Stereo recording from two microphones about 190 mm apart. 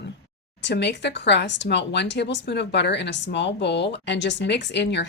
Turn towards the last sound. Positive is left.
turn(degrees=65)  # may be behind; listen again after turning